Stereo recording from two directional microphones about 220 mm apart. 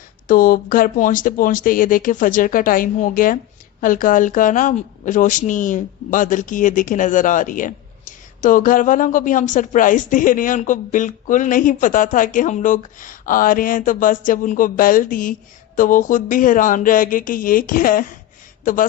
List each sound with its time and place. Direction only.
0.3 s a woman's voice: 40° left (ahead or behind)